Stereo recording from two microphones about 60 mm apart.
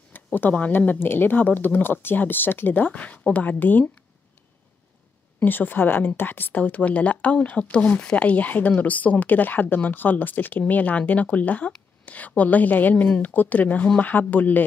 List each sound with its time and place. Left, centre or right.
0.1 s speech: left
5.4 s speech: left